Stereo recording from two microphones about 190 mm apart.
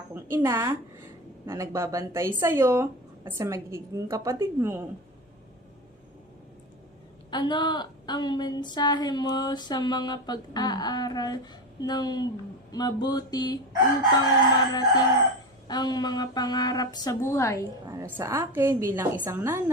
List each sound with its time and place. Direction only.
0.1 s speech: 15° right (ahead or behind)
7.3 s a woman's voice: 25° left (ahead or behind)
14.7 s a woman's voice: 20° left (ahead or behind)
17.8 s speech: 15° right (ahead or behind)